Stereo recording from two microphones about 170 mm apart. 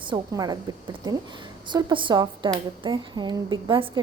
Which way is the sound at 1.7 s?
25° right (ahead or behind).